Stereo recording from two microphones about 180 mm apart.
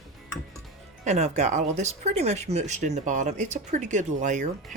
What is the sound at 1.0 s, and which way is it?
Speech, 40° right (ahead or behind).